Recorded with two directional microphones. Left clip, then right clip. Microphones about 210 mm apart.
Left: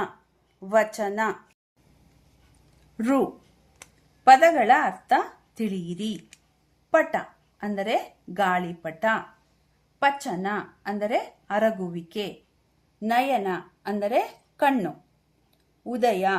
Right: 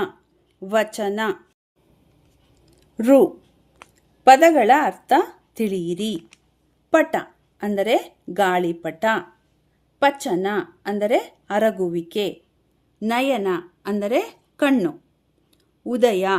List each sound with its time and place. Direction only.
0.6 s a woman's voice: 50° right (ahead or behind)
3.0 s a woman's voice: 50° right (ahead or behind)